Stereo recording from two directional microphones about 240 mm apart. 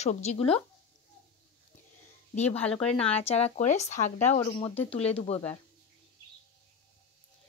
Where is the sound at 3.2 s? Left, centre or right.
Left.